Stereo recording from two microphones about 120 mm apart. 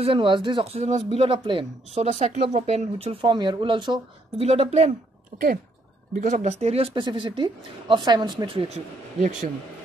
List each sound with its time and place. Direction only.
0.0 s speech: 45° right (ahead or behind)
2.0 s speech: 75° right (ahead or behind); by 3.3 s 55° right (ahead or behind)
3.3 s speech: 40° right (ahead or behind)
4.4 s speech: 60° right (ahead or behind)
6.1 s speech: 85° right; by 6.9 s 60° right (ahead or behind)
6.9 s speech: 40° right (ahead or behind); by 9.5 s 75° right (ahead or behind)